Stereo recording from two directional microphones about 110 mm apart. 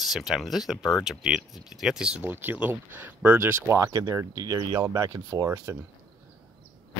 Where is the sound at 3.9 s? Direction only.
35° right (ahead or behind).